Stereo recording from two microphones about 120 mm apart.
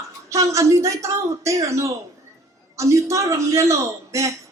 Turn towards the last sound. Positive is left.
turn(degrees=-25)  # may be behind; listen again after turning